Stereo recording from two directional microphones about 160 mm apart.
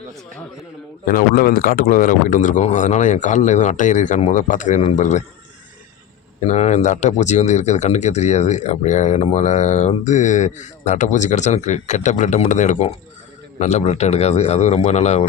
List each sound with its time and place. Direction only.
1.0 s speech: 60° left (ahead or behind)
6.5 s speech: 45° left (ahead or behind)